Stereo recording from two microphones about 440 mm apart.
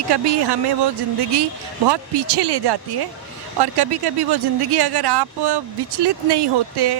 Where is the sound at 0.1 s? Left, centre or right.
Right.